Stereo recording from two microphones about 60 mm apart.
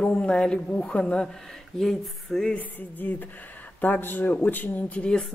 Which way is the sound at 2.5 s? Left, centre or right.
Left.